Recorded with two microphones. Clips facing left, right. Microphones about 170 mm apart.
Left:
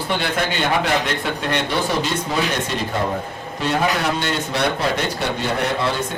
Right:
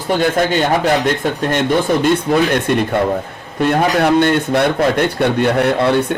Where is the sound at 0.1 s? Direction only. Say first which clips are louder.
Right 9 dB; 40° right (ahead or behind); by 2.8 s 60° right (ahead or behind).